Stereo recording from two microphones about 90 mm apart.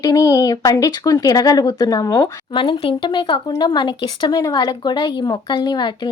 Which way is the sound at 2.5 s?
60° left (ahead or behind).